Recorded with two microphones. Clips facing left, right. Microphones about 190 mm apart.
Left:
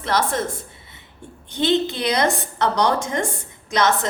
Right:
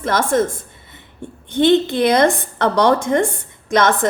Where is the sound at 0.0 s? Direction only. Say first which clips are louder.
Right 5 dB; 50° right (ahead or behind).